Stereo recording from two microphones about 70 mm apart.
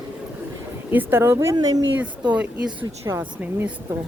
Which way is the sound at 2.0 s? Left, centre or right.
Centre.